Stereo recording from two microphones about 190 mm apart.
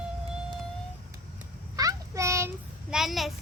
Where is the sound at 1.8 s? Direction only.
15° right (ahead or behind).